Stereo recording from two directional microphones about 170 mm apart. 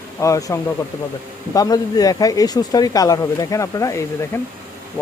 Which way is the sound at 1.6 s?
20° left (ahead or behind).